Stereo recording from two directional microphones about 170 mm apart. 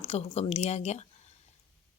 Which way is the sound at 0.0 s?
35° left (ahead or behind).